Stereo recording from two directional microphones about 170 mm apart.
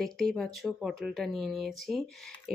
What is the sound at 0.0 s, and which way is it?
Speech, centre (ahead or behind).